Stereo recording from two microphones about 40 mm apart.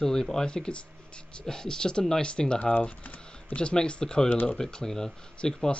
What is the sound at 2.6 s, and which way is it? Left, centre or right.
Speech, left.